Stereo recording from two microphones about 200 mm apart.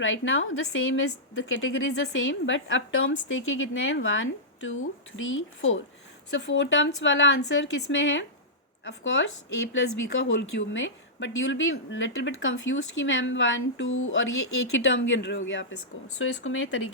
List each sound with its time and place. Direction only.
0.0 s a woman's voice: 80° left
10.2 s a woman's voice: 70° left (ahead or behind)